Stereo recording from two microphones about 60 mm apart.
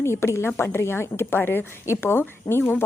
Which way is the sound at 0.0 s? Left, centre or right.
Left.